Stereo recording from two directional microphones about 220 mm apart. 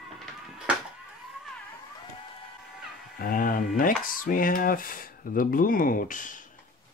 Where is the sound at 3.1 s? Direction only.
40° left (ahead or behind).